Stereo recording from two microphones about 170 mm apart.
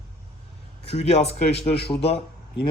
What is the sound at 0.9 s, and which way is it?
Speech, 40° left (ahead or behind).